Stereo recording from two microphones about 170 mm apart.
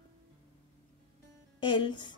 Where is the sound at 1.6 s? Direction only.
25° left (ahead or behind).